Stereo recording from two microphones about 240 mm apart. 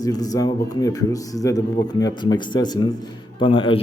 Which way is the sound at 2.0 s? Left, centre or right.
Centre.